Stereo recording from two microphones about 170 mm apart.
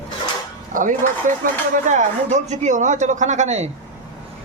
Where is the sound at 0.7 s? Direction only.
50° right (ahead or behind).